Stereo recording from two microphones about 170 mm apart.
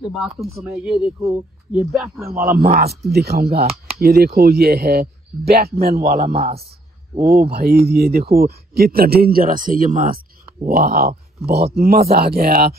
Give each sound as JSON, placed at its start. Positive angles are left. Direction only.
{"t": 0.1, "sound": "speech", "side_deg": 0}
{"t": 1.2, "sound": "speech", "side_deg": -15}
{"t": 1.8, "sound": "speech", "side_deg": -5}
{"t": 2.3, "sound": "a man's voice", "side_deg": -55}
{"t": 2.8, "sound": "speech", "side_deg": -70}
{"t": 3.6, "sound": "a sound", "side_deg": -35}
{"t": 4.0, "sound": "a man's voice", "side_deg": -65}